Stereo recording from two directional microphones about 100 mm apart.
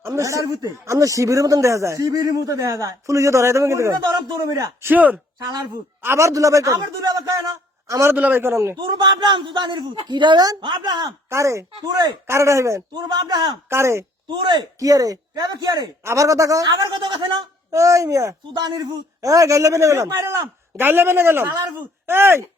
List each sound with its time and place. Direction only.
0.0 s speech: 35° right (ahead or behind)
4.2 s a man's voice: 45° right (ahead or behind)
4.8 s speech: 15° right (ahead or behind)
6.0 s a man's voice: 25° right (ahead or behind)
8.1 s speech: 15° right (ahead or behind)
8.9 s a man's voice: 50° right (ahead or behind)
11.3 s speech: 30° right (ahead or behind)
12.9 s a man's voice: 45° right (ahead or behind)
13.7 s speech: 25° right (ahead or behind)
14.3 s a man's voice: 50° right (ahead or behind)
16.0 s speech: 30° right (ahead or behind)
17.0 s a man's voice: 55° right (ahead or behind)
17.7 s speech: 30° right (ahead or behind)
18.5 s speech: 45° right (ahead or behind); by 22.4 s 25° right (ahead or behind)